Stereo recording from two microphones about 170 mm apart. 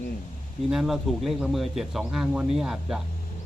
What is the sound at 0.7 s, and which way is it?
Speech, centre (ahead or behind).